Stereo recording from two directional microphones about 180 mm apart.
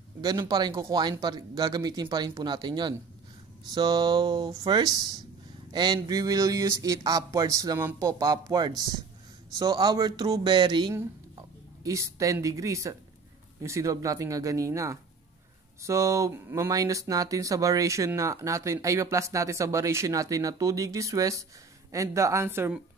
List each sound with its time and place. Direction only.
0.2 s a woman's voice: 20° right (ahead or behind)